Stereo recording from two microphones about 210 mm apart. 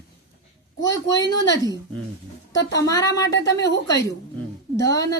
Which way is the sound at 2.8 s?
15° left (ahead or behind).